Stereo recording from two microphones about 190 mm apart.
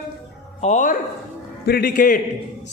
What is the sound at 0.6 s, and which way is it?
Speech, 40° left (ahead or behind).